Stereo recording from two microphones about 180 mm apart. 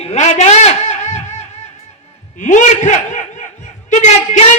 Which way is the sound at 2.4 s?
45° left (ahead or behind).